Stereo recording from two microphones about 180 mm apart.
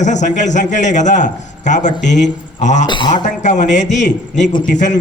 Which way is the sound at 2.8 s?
25° left (ahead or behind).